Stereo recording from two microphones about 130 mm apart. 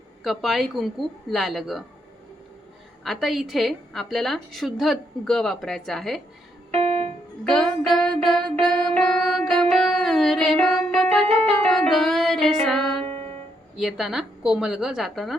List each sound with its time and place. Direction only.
0.3 s a woman's voice: centre (ahead or behind)
3.0 s a woman's voice: centre (ahead or behind)
6.7 s music: 50° right (ahead or behind)
7.4 s a woman's voice: 5° left (ahead or behind)
9.0 s music: 5° left (ahead or behind)
13.0 s music: 50° right (ahead or behind)
13.7 s a woman's voice: centre (ahead or behind)